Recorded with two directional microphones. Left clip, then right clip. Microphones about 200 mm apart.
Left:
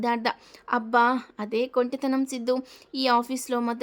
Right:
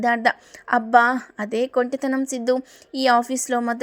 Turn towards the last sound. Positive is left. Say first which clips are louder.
# right 5 dB
turn(degrees=-15)  # may be behind; listen again after turning